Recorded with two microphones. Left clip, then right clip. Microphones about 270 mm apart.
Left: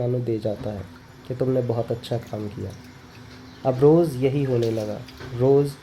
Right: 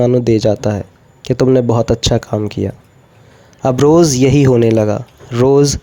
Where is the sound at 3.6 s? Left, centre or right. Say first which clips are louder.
Right 8 dB; right.